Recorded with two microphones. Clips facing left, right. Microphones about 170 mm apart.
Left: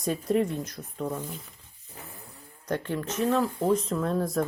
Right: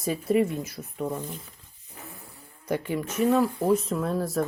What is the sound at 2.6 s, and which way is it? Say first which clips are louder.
Speech: right 2 dB; 10° right (ahead or behind).